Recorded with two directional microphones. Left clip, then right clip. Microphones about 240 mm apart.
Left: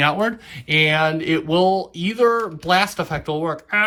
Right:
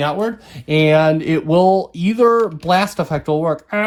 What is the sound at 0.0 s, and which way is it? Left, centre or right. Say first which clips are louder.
Speech: left 1 dB; centre.